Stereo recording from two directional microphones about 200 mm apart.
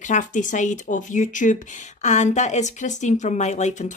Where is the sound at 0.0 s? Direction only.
40° left (ahead or behind).